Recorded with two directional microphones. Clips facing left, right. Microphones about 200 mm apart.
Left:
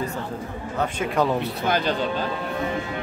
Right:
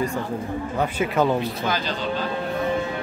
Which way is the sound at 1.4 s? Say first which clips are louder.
Left 2 dB; 60° left (ahead or behind).